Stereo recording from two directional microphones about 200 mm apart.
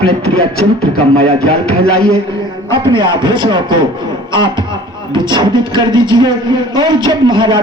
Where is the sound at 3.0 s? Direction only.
20° right (ahead or behind).